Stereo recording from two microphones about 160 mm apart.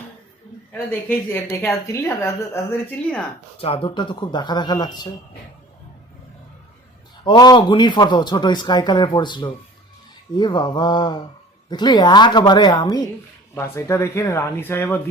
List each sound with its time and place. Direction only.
0.7 s a woman's voice: 10° left (ahead or behind)
3.6 s speech: 35° left (ahead or behind)
7.3 s speech: 25° left (ahead or behind)
13.6 s a woman's voice: 15° left (ahead or behind)